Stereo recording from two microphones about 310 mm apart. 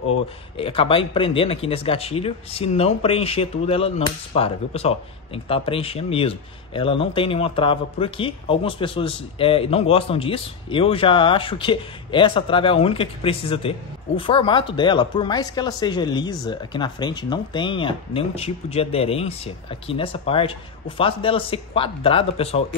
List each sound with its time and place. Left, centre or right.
0.6 s speech: centre